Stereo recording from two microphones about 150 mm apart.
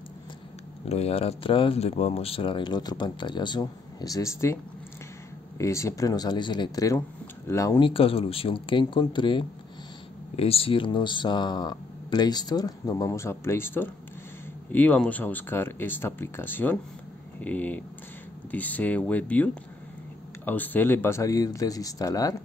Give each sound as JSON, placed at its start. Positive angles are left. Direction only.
{"t": 0.8, "sound": "speech", "side_deg": 45}
{"t": 5.6, "sound": "speech", "side_deg": 20}
{"t": 7.8, "sound": "speech", "side_deg": 40}